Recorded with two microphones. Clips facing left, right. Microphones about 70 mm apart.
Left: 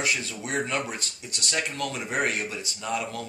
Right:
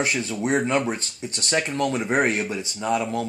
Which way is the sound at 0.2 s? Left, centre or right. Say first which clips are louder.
Right 7 dB; right.